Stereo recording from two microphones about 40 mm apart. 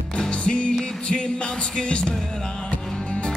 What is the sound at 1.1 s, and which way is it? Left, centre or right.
Music, left.